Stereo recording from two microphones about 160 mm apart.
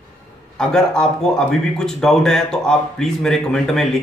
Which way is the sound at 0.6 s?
5° left (ahead or behind).